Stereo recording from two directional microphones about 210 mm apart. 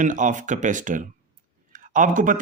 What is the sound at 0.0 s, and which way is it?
A man's voice, 35° right (ahead or behind).